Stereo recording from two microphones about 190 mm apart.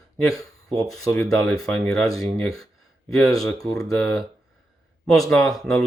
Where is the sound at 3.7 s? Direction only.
5° left (ahead or behind).